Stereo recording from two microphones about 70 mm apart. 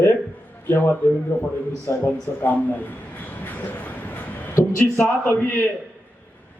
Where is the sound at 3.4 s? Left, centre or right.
Left.